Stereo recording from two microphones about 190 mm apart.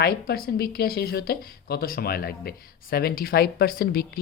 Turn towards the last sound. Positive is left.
turn(degrees=55)  # may be behind; listen again after turning